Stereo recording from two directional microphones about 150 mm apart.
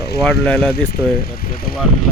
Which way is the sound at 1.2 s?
85° left.